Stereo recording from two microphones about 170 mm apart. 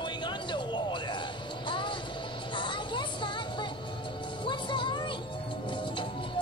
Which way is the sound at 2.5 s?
30° left (ahead or behind).